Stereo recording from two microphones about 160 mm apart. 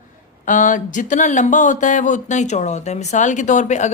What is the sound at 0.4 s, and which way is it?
Speech, 55° left (ahead or behind).